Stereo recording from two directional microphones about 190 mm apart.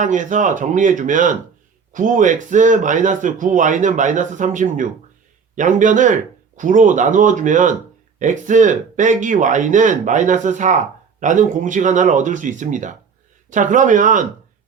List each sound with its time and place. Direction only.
0.0 s speech: 40° right (ahead or behind)